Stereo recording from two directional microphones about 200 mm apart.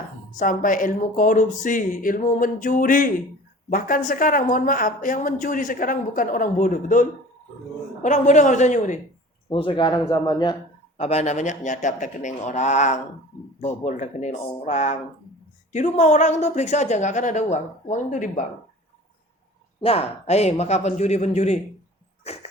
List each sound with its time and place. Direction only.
0.3 s speech: 40° left (ahead or behind)
9.6 s speech: 25° left (ahead or behind)
10.9 s speech: 30° left (ahead or behind)
19.8 s speech: 30° left (ahead or behind)
22.3 s dog: 30° left (ahead or behind)